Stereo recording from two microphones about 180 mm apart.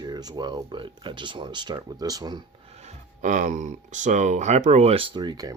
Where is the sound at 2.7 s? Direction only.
40° right (ahead or behind).